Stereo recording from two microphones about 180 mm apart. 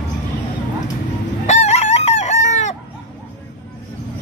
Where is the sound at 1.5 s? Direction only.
40° left (ahead or behind).